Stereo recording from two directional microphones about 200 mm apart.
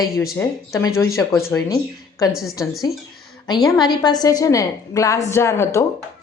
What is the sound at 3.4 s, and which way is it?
A woman's voice, 20° left (ahead or behind).